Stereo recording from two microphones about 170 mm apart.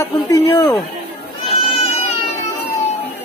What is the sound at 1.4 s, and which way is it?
Goat, 35° left (ahead or behind).